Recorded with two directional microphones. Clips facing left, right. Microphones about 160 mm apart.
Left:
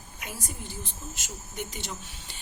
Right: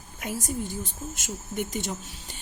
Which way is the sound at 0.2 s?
45° right (ahead or behind).